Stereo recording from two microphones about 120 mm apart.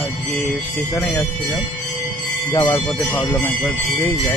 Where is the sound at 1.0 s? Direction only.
25° left (ahead or behind).